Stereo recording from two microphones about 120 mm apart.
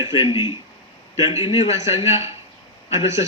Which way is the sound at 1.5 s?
60° left (ahead or behind).